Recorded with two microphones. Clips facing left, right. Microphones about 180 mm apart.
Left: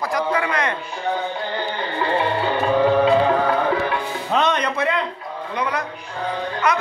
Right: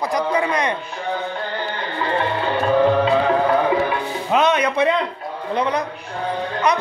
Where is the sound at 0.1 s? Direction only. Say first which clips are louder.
Right 1 dB; 20° right (ahead or behind).